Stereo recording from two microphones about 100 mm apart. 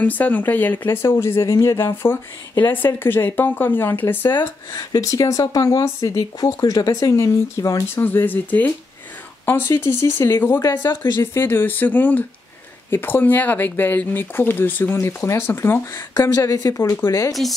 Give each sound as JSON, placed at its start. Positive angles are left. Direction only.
{"t": 0.0, "sound": "speech", "side_deg": 15}
{"t": 2.6, "sound": "speech", "side_deg": 20}
{"t": 4.7, "sound": "speech", "side_deg": 35}
{"t": 17.3, "sound": "speech", "side_deg": 0}